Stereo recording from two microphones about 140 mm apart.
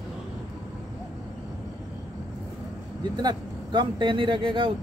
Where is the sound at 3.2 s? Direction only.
35° right (ahead or behind).